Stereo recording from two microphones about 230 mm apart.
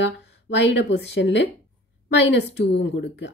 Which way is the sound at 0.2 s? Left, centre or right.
Left.